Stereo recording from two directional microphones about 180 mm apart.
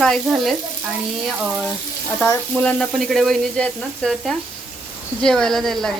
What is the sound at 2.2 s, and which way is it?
Speech, 10° left (ahead or behind).